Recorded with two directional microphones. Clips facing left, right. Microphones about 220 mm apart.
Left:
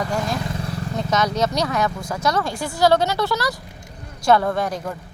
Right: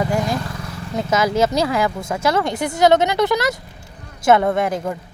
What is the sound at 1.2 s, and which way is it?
Speech, 25° right (ahead or behind).